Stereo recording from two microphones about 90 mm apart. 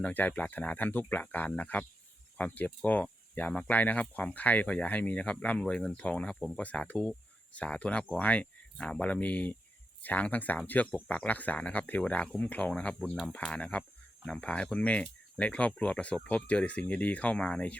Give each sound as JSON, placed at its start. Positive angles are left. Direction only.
{"t": 0.0, "sound": "speech", "side_deg": 20}